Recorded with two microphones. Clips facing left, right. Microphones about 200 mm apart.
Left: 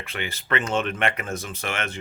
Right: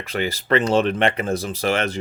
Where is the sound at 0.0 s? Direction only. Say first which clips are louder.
Right 8 dB; 40° right (ahead or behind).